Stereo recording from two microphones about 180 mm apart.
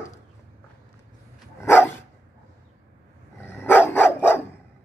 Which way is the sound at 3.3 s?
10° left (ahead or behind).